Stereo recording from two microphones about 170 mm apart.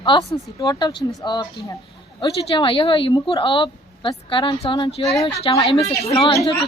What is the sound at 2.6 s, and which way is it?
A woman's voice, 30° left (ahead or behind).